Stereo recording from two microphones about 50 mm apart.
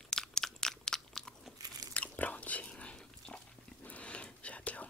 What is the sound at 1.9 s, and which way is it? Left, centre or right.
Chewing, left.